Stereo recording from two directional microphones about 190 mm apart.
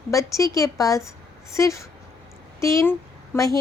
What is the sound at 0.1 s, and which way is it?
A woman's voice, 15° left (ahead or behind).